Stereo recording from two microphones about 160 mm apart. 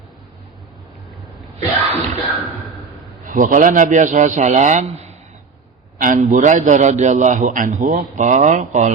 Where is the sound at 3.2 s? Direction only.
55° right (ahead or behind).